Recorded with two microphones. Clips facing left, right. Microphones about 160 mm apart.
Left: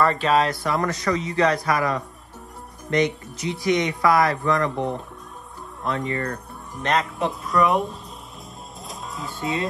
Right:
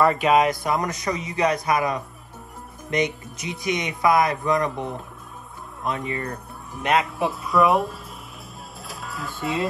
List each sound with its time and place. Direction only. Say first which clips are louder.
0.0 s speech: right 2 dB; 10° right (ahead or behind)
5.9 s speech: left 2 dB; 15° right (ahead or behind)
8.8 s music: even; 5° right (ahead or behind)